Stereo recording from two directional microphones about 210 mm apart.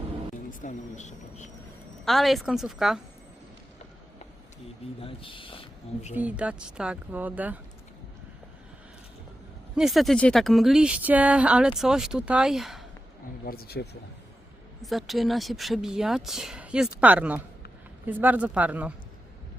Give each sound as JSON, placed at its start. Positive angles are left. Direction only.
{"t": 0.6, "sound": "speech", "side_deg": 35}
{"t": 2.0, "sound": "speech", "side_deg": 0}
{"t": 4.9, "sound": "speech", "side_deg": 25}
{"t": 6.1, "sound": "speech", "side_deg": -5}
{"t": 9.7, "sound": "speech", "side_deg": 0}
{"t": 13.4, "sound": "speech", "side_deg": 45}
{"t": 14.8, "sound": "speech", "side_deg": 0}